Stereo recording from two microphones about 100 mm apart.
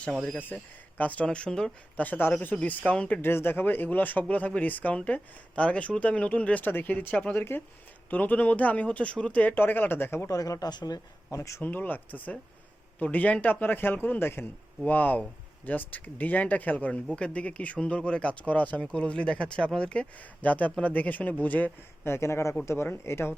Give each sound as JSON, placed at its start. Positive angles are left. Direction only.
{"t": 0.3, "sound": "speech", "side_deg": 15}
{"t": 10.3, "sound": "speech", "side_deg": 35}
{"t": 11.3, "sound": "speech", "side_deg": 30}
{"t": 11.6, "sound": "a man's voice", "side_deg": 20}